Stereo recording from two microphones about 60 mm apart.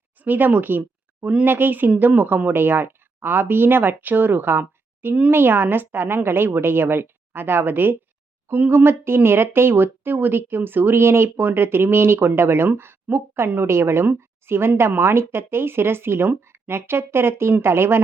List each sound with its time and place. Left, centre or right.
0.2 s a woman's voice: right